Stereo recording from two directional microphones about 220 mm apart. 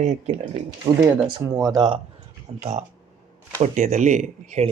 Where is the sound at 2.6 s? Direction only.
30° right (ahead or behind).